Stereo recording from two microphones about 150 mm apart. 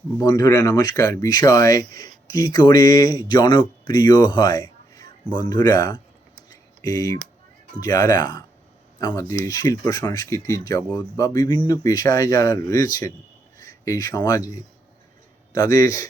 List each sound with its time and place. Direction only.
0.2 s speech: 25° left (ahead or behind)
6.5 s a sound: 25° left (ahead or behind)
7.8 s speech: 25° left (ahead or behind)
15.5 s speech: 20° left (ahead or behind)